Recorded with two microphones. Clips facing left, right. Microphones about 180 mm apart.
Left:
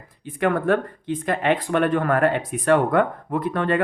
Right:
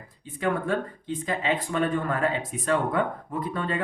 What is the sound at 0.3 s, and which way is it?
Speech, 65° left (ahead or behind).